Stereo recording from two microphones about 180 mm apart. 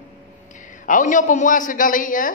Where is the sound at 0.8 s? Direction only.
45° left (ahead or behind).